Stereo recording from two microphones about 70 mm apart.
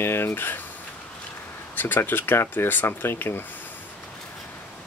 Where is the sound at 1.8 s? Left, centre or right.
Left.